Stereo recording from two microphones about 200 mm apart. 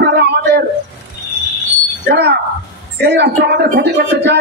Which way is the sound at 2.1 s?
55° right (ahead or behind).